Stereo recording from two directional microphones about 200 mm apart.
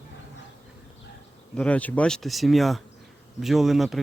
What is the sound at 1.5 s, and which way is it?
Speech, 5° left (ahead or behind).